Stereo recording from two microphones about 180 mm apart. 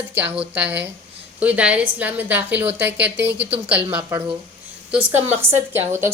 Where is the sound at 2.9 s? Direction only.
75° right (ahead or behind).